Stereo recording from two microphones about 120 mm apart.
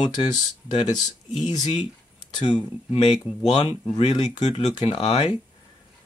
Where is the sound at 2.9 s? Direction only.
45° left (ahead or behind).